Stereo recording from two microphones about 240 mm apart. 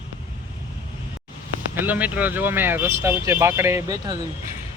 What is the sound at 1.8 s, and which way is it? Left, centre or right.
Speech, centre.